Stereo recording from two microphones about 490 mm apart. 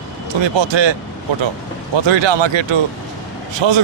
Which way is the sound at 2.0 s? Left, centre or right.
Right.